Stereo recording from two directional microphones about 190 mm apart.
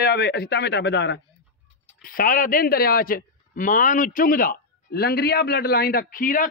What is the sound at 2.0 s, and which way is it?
Speech, 50° left (ahead or behind).